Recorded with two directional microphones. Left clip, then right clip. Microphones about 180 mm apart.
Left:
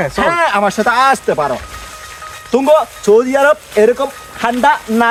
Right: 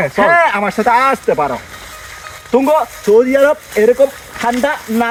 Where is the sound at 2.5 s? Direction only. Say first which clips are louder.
Left 1 dB; 20° left (ahead or behind).